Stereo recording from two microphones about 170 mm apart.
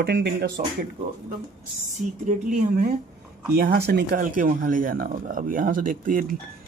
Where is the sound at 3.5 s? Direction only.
70° right (ahead or behind).